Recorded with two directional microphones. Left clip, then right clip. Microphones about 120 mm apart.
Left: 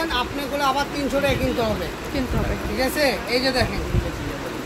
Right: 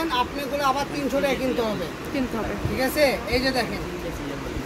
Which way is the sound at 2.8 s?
30° right (ahead or behind).